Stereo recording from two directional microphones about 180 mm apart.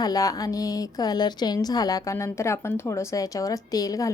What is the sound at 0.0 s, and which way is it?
A woman's voice, 20° left (ahead or behind).